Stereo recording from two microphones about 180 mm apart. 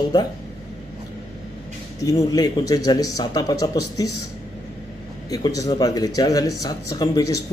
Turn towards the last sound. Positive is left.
turn(degrees=20)  # may be behind; listen again after turning